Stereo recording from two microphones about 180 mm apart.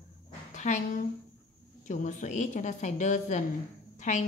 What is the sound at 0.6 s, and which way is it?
A woman's voice, 40° left (ahead or behind).